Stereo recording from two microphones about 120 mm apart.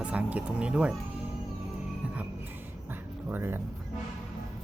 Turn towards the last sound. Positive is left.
turn(degrees=-20)  # may be behind; listen again after turning